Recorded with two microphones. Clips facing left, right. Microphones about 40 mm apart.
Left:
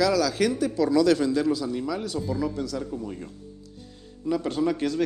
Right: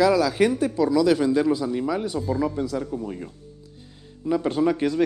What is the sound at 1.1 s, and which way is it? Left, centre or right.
A man's voice, centre.